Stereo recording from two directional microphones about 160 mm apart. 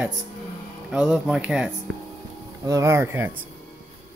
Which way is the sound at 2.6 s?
20° right (ahead or behind).